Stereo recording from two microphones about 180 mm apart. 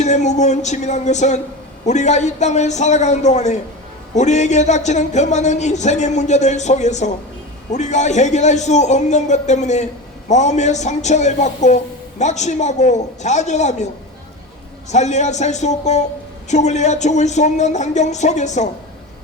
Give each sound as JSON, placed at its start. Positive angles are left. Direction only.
{"t": 0.0, "sound": "a man's voice", "side_deg": 40}